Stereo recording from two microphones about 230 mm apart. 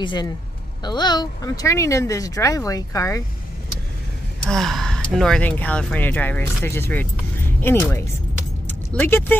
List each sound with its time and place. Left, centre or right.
0.0 s speech: left
4.5 s speech: centre
8.6 s keys jangling: centre